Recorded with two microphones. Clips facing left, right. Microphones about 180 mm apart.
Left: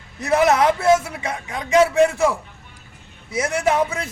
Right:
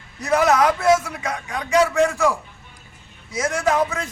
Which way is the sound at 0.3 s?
25° left (ahead or behind).